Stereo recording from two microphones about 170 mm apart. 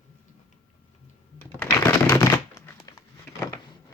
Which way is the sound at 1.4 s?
15° left (ahead or behind).